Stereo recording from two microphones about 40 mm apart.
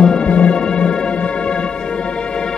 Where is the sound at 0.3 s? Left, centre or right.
Left.